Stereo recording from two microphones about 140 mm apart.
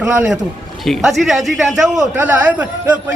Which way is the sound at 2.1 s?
15° right (ahead or behind).